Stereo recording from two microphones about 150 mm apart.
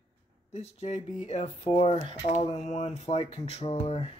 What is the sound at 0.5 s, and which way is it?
Speech, 50° left (ahead or behind).